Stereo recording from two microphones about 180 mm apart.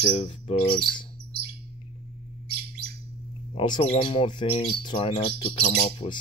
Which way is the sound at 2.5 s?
60° right (ahead or behind).